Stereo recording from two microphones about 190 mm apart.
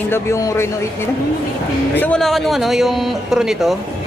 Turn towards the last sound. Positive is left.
turn(degrees=0)  # may be behind; listen again after turning